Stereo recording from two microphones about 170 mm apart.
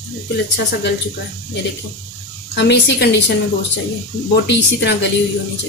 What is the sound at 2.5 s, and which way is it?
Speech, 90° left.